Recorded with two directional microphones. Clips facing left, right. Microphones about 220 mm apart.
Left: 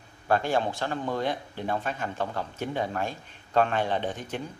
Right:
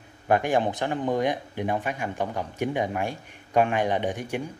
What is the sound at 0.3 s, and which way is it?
Speech, 15° right (ahead or behind).